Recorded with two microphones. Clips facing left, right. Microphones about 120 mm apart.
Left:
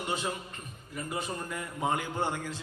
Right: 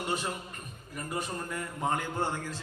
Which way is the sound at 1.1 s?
10° left (ahead or behind).